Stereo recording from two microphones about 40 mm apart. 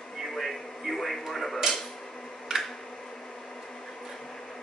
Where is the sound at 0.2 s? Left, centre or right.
Centre.